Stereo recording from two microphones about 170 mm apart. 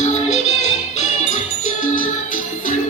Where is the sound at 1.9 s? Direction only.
50° left (ahead or behind).